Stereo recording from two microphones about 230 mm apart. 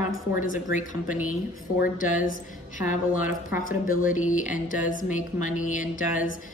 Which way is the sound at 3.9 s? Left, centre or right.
Left.